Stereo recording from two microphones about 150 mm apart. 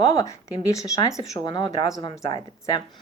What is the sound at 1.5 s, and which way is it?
Speech, 30° left (ahead or behind).